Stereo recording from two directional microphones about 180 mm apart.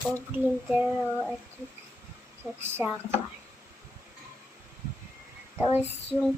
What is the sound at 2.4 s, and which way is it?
Speech, 15° right (ahead or behind).